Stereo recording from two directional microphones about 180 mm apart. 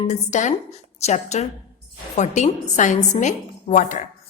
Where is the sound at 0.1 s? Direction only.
40° left (ahead or behind).